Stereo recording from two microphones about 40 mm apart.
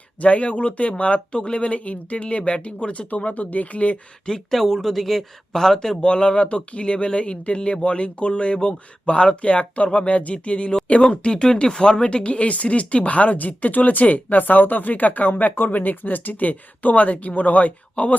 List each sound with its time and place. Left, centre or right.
0.2 s speech: left
4.3 s speech: centre; by 18.1 s left